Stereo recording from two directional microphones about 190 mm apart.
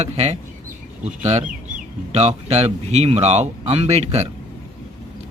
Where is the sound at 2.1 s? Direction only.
35° right (ahead or behind).